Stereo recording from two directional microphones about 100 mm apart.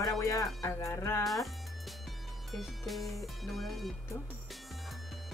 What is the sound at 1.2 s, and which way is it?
Speech, centre (ahead or behind).